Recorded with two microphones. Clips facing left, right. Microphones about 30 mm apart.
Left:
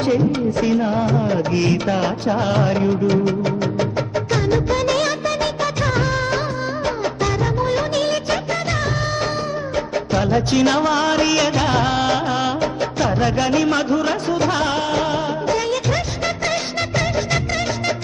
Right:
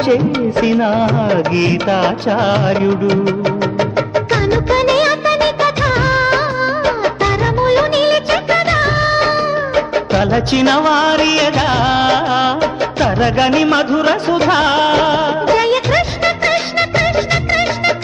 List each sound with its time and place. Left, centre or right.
0.0 s music: right